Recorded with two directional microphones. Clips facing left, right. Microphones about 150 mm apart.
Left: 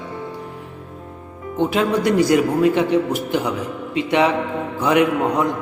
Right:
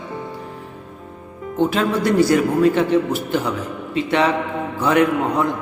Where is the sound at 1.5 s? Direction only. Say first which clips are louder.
Even; 15° left (ahead or behind).